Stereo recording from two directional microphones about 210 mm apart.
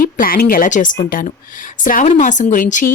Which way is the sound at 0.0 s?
40° left (ahead or behind).